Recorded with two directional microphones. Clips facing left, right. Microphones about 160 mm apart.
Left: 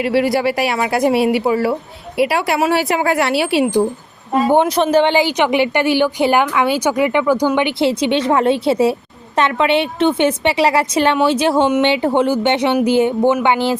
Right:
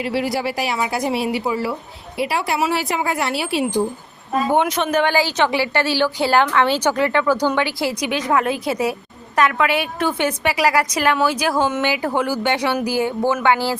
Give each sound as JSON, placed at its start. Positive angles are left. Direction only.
{"t": 0.0, "sound": "speech", "side_deg": 65}
{"t": 4.4, "sound": "a woman's voice", "side_deg": 30}